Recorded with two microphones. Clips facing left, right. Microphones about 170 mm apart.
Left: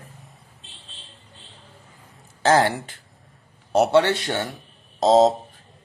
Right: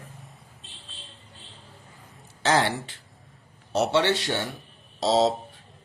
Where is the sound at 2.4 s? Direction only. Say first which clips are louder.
Left 5 dB; 45° left (ahead or behind).